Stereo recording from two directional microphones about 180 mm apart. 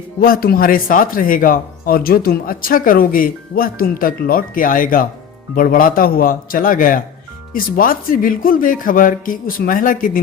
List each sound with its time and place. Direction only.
0.2 s speech: 55° left (ahead or behind)